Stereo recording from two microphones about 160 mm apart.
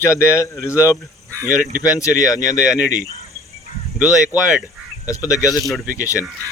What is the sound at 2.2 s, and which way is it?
Speech, 20° left (ahead or behind).